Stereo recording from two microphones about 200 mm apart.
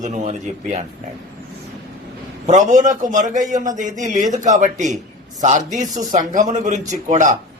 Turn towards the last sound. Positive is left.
turn(degrees=-40)  # may be behind; listen again after turning